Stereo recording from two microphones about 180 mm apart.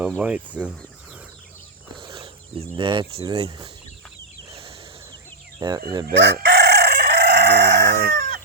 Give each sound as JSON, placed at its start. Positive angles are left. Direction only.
{"t": 0.0, "sound": "speech", "side_deg": -10}
{"t": 2.0, "sound": "speech", "side_deg": -30}
{"t": 5.5, "sound": "speech", "side_deg": -20}
{"t": 5.9, "sound": "chicken", "side_deg": -20}
{"t": 6.1, "sound": "chicken", "side_deg": -75}